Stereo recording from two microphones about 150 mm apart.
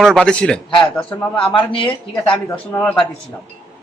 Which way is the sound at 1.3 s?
35° left (ahead or behind).